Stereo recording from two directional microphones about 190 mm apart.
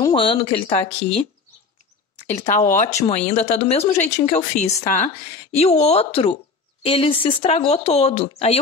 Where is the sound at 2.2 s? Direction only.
40° left (ahead or behind).